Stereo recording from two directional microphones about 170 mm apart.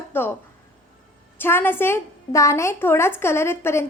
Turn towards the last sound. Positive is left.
turn(degrees=15)  # may be behind; listen again after turning